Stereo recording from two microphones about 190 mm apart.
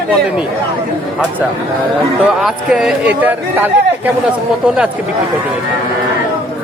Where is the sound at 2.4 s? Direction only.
Centre (ahead or behind).